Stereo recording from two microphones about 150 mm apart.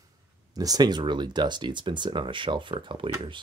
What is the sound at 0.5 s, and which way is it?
Speech, 25° right (ahead or behind).